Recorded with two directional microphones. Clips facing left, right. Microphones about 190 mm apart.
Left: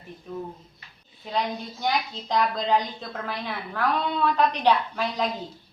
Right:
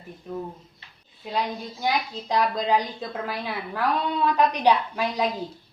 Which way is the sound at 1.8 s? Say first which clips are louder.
Right 1 dB; 5° right (ahead or behind).